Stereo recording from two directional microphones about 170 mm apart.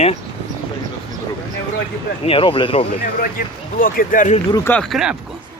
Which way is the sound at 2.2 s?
30° left (ahead or behind).